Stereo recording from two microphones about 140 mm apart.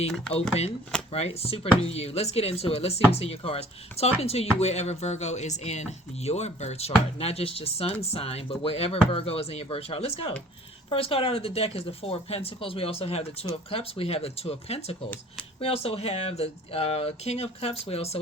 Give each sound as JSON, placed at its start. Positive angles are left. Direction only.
{"t": 1.1, "sound": "speech", "side_deg": 45}